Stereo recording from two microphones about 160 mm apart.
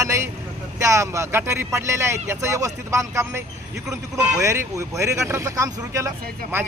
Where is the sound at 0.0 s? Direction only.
20° right (ahead or behind).